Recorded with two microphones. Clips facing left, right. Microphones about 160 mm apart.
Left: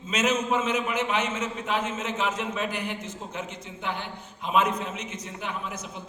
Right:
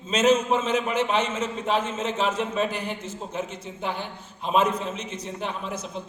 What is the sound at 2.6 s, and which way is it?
Speech, 15° left (ahead or behind).